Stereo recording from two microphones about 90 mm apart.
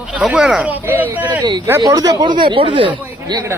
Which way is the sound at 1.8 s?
40° right (ahead or behind).